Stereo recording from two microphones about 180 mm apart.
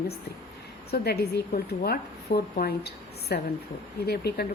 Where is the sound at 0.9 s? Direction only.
65° left (ahead or behind).